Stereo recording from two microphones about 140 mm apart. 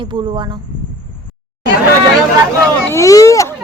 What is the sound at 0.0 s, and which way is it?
Speech, 35° right (ahead or behind).